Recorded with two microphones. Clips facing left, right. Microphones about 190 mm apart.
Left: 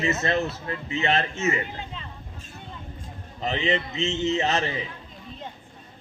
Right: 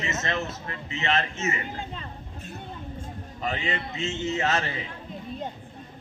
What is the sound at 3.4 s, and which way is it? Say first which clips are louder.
A man's voice: left 5 dB; 25° left (ahead or behind).